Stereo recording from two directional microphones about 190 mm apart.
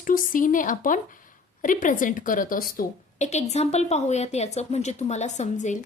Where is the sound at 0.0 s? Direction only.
45° left (ahead or behind).